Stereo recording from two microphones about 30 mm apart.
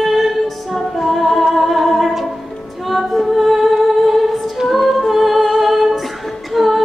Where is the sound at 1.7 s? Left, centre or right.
Centre.